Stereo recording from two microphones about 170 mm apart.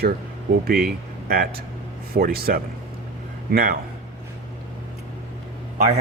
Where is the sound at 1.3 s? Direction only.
65° right (ahead or behind).